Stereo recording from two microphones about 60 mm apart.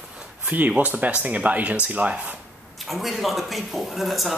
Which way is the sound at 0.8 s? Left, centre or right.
Right.